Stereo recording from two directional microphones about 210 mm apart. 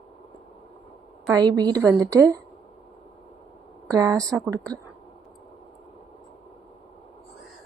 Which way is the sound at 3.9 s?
15° right (ahead or behind).